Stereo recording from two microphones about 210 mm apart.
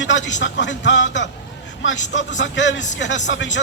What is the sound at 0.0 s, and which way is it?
Speech, 60° left (ahead or behind).